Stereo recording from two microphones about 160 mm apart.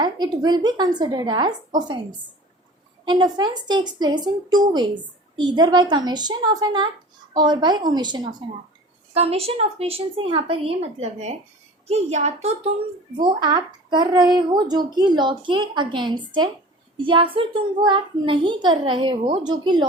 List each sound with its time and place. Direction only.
0.0 s speech: 25° right (ahead or behind)
3.0 s speech: 30° right (ahead or behind)
9.1 s speech: 40° right (ahead or behind)
13.2 s speech: 30° right (ahead or behind)